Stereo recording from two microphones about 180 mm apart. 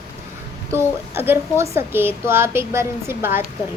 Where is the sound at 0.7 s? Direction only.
15° right (ahead or behind).